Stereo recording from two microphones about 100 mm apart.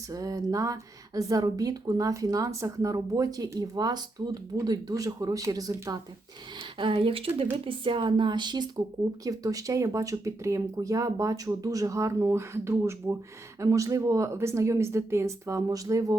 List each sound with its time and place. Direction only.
0.1 s speech: 35° right (ahead or behind)
6.6 s speech: 60° right (ahead or behind); by 16.1 s 35° right (ahead or behind)